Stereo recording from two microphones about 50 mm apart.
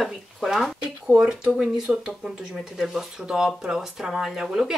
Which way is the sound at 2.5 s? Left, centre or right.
Centre.